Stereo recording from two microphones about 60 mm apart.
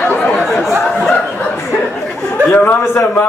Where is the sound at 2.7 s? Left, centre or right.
Left.